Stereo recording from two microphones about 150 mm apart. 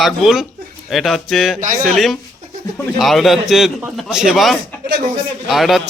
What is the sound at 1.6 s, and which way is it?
Speech, 60° right (ahead or behind).